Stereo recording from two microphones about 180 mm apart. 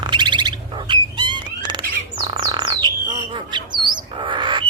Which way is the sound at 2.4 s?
25° right (ahead or behind).